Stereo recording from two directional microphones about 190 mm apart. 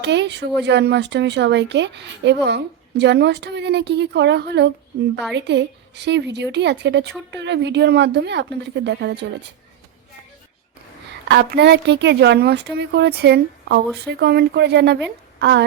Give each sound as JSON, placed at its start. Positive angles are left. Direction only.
{"t": 0.0, "sound": "speech", "side_deg": -65}
{"t": 11.3, "sound": "speech", "side_deg": -60}